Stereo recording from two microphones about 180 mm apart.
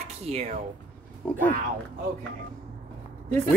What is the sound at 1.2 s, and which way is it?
Speech, 10° left (ahead or behind).